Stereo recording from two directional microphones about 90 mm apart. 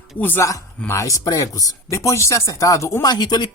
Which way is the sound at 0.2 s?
20° left (ahead or behind).